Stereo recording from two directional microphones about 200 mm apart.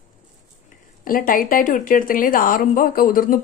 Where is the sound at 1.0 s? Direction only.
45° left (ahead or behind).